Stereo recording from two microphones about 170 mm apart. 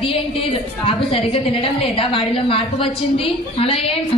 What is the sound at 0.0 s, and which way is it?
A woman's voice, 30° left (ahead or behind).